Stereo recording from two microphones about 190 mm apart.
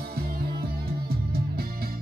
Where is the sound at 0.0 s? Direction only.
55° right (ahead or behind).